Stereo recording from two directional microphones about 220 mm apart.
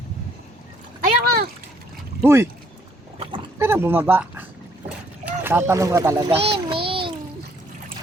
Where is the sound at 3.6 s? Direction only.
10° right (ahead or behind).